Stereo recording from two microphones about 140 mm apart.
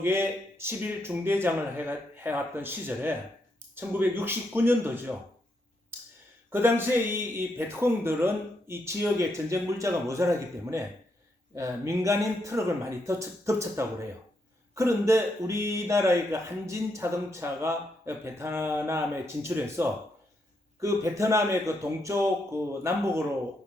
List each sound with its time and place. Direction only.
0.0 s speech: 15° right (ahead or behind)
6.5 s speech: 15° right (ahead or behind)